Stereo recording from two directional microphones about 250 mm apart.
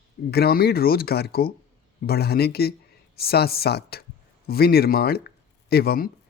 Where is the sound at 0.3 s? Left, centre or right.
Left.